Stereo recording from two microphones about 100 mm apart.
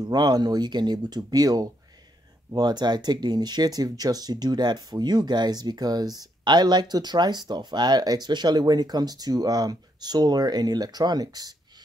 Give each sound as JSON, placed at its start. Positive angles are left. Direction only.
{"t": 0.0, "sound": "speech", "side_deg": -45}